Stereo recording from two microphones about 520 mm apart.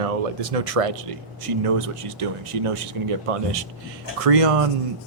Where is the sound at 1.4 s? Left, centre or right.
Right.